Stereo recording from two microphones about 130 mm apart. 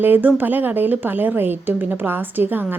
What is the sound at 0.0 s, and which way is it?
A woman's voice, 15° right (ahead or behind).